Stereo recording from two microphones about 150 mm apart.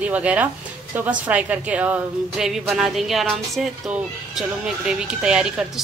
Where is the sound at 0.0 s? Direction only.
10° right (ahead or behind).